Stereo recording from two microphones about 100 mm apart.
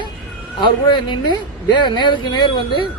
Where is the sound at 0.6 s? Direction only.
50° left (ahead or behind).